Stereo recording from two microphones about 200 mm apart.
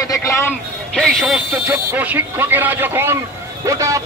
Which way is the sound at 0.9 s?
Centre (ahead or behind).